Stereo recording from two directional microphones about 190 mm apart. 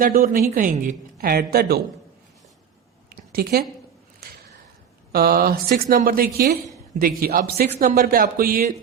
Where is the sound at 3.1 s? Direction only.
55° right (ahead or behind).